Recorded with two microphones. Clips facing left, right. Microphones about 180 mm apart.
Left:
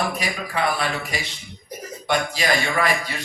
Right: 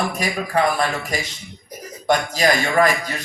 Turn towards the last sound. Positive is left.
turn(degrees=-45)  # may be behind; listen again after turning